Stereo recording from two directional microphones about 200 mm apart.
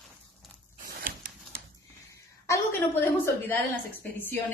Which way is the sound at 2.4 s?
15° left (ahead or behind).